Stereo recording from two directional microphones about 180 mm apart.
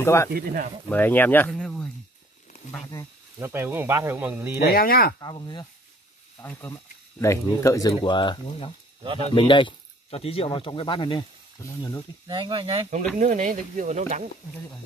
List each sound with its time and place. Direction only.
0.0 s speech: 15° left (ahead or behind)
0.3 s speech: 50° right (ahead or behind)
0.8 s speech: 10° left (ahead or behind)
2.7 s speech: 15° left (ahead or behind)
3.3 s speech: 15° right (ahead or behind)
4.6 s speech: 55° left (ahead or behind)
5.2 s speech: 25° left (ahead or behind)
12.3 s speech: 25° right (ahead or behind)
13.2 s speech: 45° right (ahead or behind)